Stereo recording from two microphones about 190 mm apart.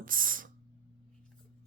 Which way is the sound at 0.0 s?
45° right (ahead or behind).